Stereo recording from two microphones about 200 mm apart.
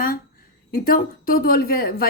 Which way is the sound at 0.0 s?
45° left (ahead or behind).